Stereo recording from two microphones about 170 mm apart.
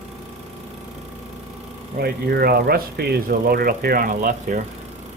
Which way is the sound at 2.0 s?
65° right (ahead or behind).